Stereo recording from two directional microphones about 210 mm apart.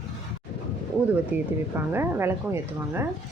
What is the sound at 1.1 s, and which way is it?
A woman's voice, 10° right (ahead or behind).